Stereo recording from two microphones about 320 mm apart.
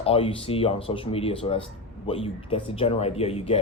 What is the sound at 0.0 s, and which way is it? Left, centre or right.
Speech, centre.